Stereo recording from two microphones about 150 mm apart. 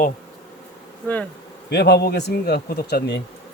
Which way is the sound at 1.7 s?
90° left.